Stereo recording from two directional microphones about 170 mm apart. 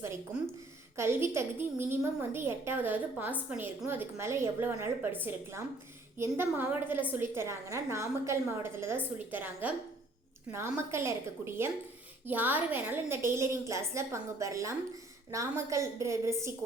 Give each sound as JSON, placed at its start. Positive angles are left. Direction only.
{"t": 0.9, "sound": "a woman's voice", "side_deg": -15}